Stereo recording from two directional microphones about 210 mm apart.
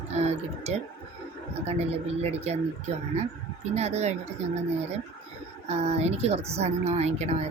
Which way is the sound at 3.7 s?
30° right (ahead or behind).